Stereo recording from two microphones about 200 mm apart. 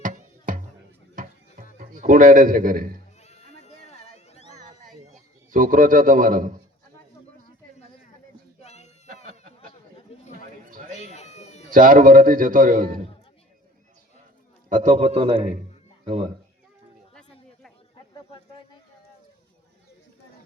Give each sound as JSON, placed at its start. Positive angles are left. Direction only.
{"t": 0.0, "sound": "music", "side_deg": -40}
{"t": 1.8, "sound": "a man's voice", "side_deg": -40}
{"t": 3.2, "sound": "music", "side_deg": 35}
{"t": 5.5, "sound": "a man's voice", "side_deg": -40}
{"t": 8.6, "sound": "a sound", "side_deg": 35}
{"t": 10.1, "sound": "chatter", "side_deg": 30}
{"t": 10.9, "sound": "cat", "side_deg": 35}
{"t": 11.7, "sound": "a man's voice", "side_deg": -40}
{"t": 14.7, "sound": "a man's voice", "side_deg": -40}